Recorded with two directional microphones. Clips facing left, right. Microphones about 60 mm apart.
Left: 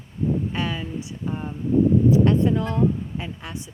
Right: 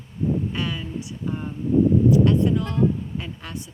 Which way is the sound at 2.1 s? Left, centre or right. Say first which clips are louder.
Even; left.